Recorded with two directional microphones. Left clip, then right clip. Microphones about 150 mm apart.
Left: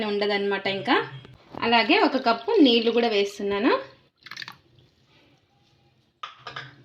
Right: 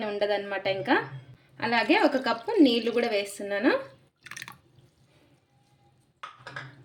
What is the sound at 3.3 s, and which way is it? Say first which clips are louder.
Speech: left 3 dB; 25° left (ahead or behind).